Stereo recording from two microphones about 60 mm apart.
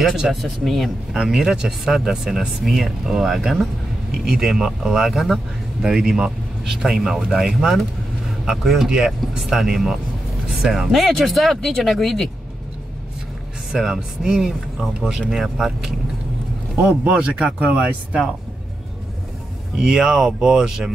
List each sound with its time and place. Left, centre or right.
0.0 s speech: centre
1.1 s speech: centre
13.7 s speech: centre
17.0 s speech: centre
19.8 s speech: centre